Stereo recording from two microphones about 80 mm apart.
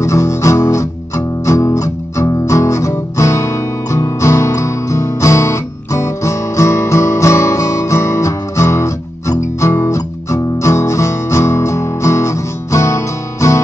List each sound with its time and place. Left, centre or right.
0.0 s guitar: left
9.8 s music: left